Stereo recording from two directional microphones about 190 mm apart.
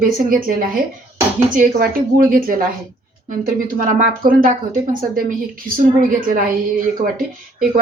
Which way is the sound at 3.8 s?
45° right (ahead or behind).